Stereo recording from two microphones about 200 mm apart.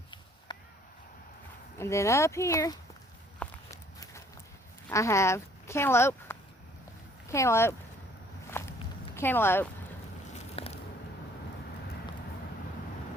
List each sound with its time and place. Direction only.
0.5 s a sound: 20° left (ahead or behind)
1.8 s speech: 15° left (ahead or behind)
3.4 s walk: 15° left (ahead or behind)
4.9 s speech: 15° left (ahead or behind)
8.4 s walk: 15° left (ahead or behind)
9.1 s speech: 10° left (ahead or behind)
10.5 s a sound: 30° left (ahead or behind)